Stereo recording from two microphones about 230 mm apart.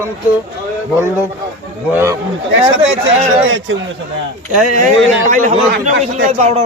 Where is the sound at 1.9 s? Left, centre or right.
Centre.